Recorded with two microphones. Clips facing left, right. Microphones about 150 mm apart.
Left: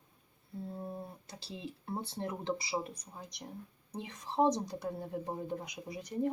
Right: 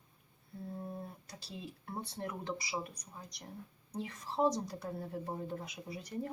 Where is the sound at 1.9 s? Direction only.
30° left (ahead or behind).